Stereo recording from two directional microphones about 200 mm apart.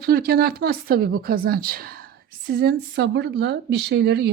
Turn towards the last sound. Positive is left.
turn(degrees=-55)  # may be behind; listen again after turning